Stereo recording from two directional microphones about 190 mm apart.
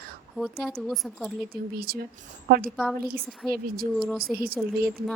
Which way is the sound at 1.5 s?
50° right (ahead or behind).